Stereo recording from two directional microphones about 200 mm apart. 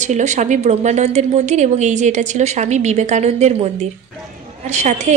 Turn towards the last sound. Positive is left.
turn(degrees=-35)  # may be behind; listen again after turning